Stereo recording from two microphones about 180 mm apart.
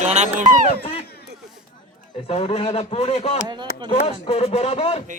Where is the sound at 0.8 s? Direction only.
30° left (ahead or behind).